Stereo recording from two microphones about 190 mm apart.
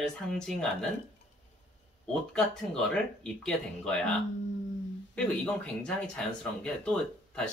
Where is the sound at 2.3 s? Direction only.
5° left (ahead or behind).